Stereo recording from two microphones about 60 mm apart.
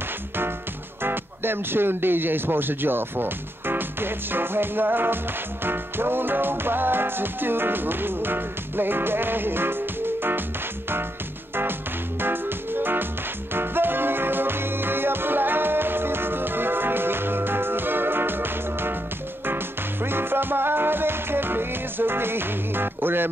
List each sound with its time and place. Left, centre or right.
1.0 s speech: right
12.2 s music: right